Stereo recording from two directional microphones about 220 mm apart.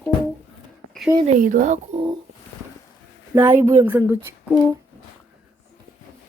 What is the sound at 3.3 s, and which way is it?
Speech, 10° right (ahead or behind).